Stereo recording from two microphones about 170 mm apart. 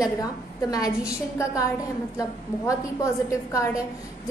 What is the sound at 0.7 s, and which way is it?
A woman's voice, 20° left (ahead or behind).